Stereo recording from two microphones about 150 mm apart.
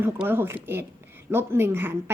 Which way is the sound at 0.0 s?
15° right (ahead or behind).